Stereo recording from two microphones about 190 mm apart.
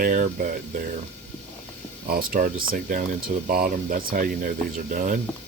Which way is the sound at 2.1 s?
50° right (ahead or behind).